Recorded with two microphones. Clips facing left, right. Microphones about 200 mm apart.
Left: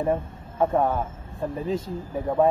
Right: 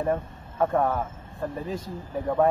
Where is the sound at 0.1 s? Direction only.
25° left (ahead or behind).